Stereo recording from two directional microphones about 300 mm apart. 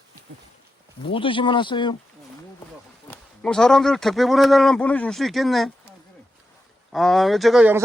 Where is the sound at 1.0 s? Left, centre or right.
Centre.